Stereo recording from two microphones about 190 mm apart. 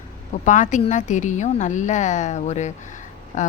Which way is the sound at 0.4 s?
40° left (ahead or behind).